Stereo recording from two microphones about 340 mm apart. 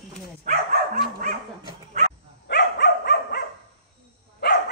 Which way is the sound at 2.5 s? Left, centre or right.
Left.